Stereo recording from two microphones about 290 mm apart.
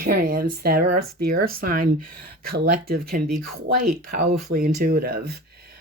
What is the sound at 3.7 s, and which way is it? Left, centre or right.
A woman's voice, right.